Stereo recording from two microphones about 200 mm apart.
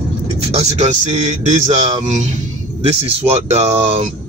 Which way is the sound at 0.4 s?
30° right (ahead or behind).